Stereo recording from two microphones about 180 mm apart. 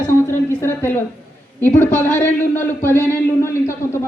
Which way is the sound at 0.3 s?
15° left (ahead or behind).